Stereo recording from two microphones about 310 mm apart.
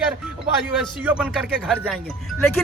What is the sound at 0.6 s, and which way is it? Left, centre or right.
Speech, centre.